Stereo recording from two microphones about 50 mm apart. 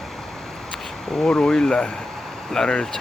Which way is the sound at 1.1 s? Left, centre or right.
Centre.